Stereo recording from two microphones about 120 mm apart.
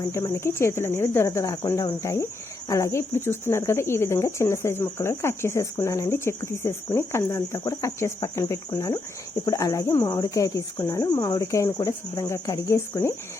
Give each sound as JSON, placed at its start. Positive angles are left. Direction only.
{"t": 0.1, "sound": "speech", "side_deg": 20}